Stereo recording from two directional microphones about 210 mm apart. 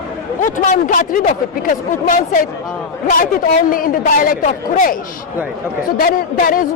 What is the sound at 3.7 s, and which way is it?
Speech, 40° left (ahead or behind).